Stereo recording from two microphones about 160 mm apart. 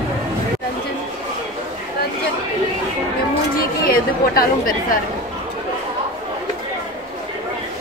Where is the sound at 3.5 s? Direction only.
65° left (ahead or behind).